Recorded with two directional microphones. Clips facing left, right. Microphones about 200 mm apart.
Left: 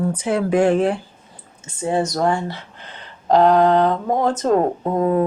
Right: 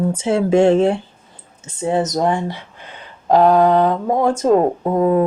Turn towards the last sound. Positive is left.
turn(degrees=-10)  # may be behind; listen again after turning